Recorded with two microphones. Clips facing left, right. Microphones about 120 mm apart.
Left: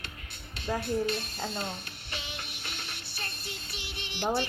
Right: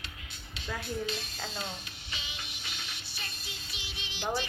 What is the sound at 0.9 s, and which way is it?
Speech, 60° left (ahead or behind).